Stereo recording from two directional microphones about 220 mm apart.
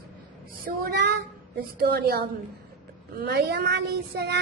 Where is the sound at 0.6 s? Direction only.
50° right (ahead or behind).